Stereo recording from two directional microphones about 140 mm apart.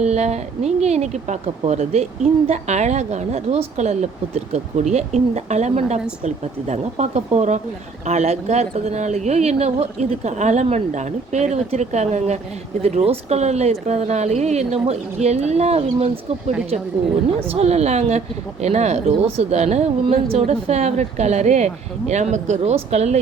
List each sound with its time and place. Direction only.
0.0 s a woman's voice: 55° right (ahead or behind)
17.5 s a woman's voice: 50° right (ahead or behind)